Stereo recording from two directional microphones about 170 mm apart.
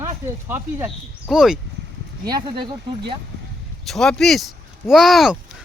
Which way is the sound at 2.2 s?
25° right (ahead or behind).